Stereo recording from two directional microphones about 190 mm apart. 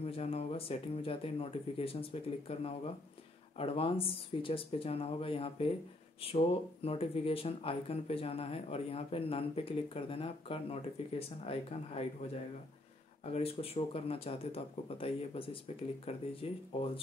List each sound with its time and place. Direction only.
0.0 s speech: 30° left (ahead or behind)